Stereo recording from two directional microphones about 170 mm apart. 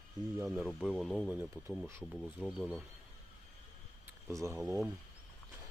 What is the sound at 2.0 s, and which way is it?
Speech, centre (ahead or behind).